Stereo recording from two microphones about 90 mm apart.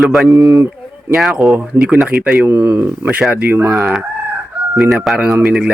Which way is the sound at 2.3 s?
20° right (ahead or behind).